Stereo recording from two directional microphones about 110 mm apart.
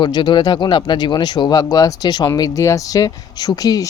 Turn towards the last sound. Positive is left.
turn(degrees=35)  # may be behind; listen again after turning